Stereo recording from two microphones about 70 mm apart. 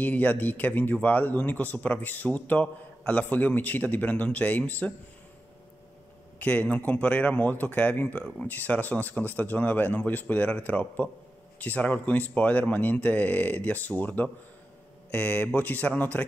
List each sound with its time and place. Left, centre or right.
0.0 s a man's voice: left
6.4 s a man's voice: centre